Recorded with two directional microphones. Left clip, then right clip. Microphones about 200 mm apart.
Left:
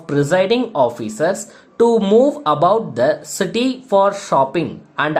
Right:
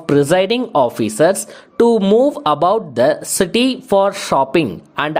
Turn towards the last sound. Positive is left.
turn(degrees=-40)  # may be behind; listen again after turning